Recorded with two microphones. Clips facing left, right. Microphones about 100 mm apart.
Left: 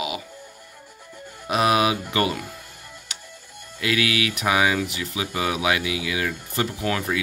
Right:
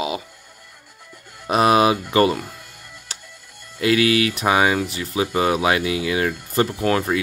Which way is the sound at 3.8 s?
35° right (ahead or behind).